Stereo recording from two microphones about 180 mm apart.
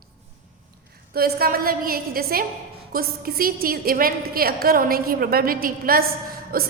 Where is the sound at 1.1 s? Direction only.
55° right (ahead or behind).